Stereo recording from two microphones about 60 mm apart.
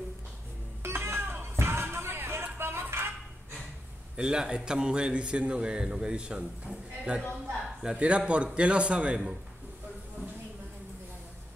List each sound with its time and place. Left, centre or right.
0.8 s music: right
4.2 s a man's voice: centre